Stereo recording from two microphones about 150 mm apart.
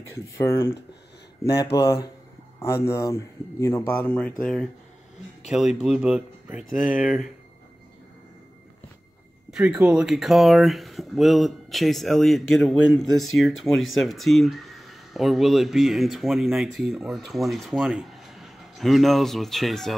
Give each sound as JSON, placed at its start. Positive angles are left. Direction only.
{"t": 0.4, "sound": "speech", "side_deg": 20}
{"t": 9.5, "sound": "speech", "side_deg": -5}